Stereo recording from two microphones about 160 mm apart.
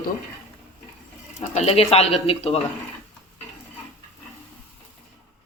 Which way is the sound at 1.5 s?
40° left (ahead or behind).